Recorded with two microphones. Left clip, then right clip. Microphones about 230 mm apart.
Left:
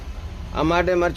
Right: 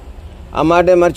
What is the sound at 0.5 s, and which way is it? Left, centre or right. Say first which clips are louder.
Speech: right 9 dB; right.